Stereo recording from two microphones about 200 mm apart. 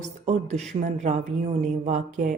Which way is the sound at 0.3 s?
35° right (ahead or behind).